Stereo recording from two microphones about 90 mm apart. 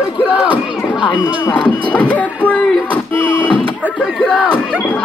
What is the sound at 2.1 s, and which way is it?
Speech, 15° left (ahead or behind).